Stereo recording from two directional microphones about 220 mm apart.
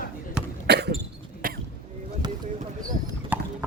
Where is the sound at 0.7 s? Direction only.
50° right (ahead or behind).